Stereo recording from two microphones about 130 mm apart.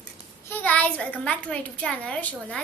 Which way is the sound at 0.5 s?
10° left (ahead or behind).